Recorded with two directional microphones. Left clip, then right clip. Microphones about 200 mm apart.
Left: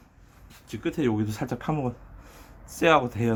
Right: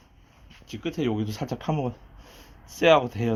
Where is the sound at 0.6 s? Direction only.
20° right (ahead or behind).